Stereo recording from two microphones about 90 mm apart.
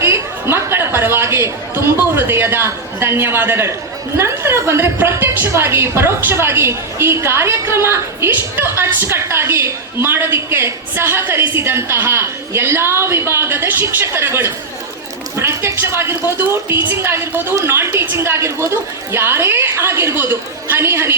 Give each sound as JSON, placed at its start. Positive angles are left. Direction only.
{"t": 0.0, "sound": "chatter", "side_deg": -30}
{"t": 2.1, "sound": "a woman's voice", "side_deg": -25}